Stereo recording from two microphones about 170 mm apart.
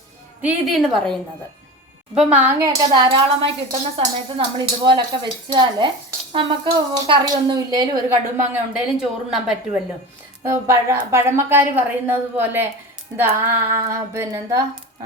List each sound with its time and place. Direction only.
0.4 s a woman's voice: centre (ahead or behind)
2.9 s speech: 30° right (ahead or behind)
8.4 s a woman's voice: 5° right (ahead or behind)
10.4 s a woman's voice: 15° right (ahead or behind)